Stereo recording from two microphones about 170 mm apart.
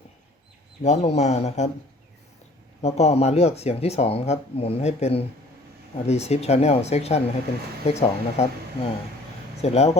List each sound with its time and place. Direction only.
0.8 s speech: 40° left (ahead or behind)
2.8 s speech: 40° left (ahead or behind)